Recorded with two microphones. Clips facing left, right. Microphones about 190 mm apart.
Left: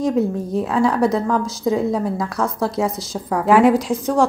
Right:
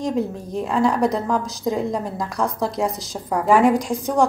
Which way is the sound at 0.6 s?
5° left (ahead or behind).